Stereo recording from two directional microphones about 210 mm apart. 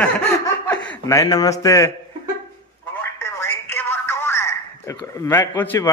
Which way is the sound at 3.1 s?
10° left (ahead or behind).